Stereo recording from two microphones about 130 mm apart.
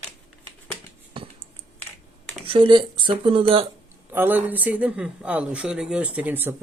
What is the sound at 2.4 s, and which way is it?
Speech, 40° right (ahead or behind).